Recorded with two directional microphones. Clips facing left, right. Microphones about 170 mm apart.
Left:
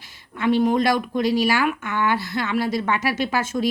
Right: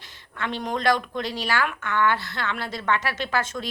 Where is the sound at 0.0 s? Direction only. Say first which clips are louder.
Left 9 dB; 10° left (ahead or behind).